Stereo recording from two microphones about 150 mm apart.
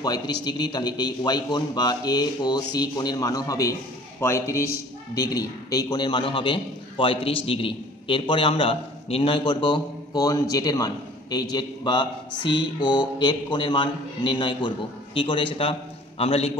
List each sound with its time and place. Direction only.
0.0 s a man's voice: 25° left (ahead or behind)